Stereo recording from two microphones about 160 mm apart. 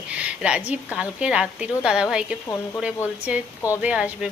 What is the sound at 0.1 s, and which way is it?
Speech, 5° right (ahead or behind).